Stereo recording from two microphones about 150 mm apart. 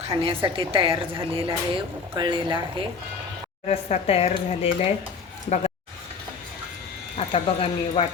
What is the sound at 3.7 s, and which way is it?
Speech, 45° left (ahead or behind).